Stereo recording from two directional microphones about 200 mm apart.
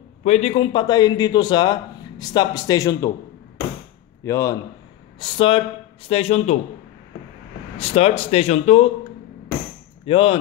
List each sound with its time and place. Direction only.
0.2 s a man's voice: 30° left (ahead or behind)
4.2 s a man's voice: 15° left (ahead or behind)
5.2 s a man's voice: 25° left (ahead or behind)
7.8 s speech: 30° left (ahead or behind)
10.0 s a man's voice: 30° left (ahead or behind)